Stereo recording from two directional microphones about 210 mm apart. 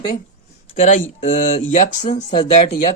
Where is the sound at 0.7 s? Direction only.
35° left (ahead or behind).